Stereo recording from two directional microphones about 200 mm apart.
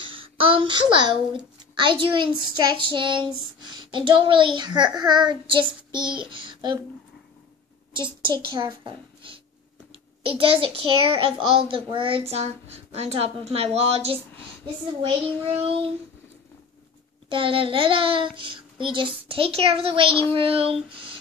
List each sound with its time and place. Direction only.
0.0 s a child's voice: 25° right (ahead or behind)
5.9 s child singing: 25° right (ahead or behind)
6.3 s a child's voice: 25° right (ahead or behind)
7.9 s a child's voice: 25° right (ahead or behind)
15.4 s a child's voice: 30° right (ahead or behind)
17.3 s a child's voice: 25° right (ahead or behind)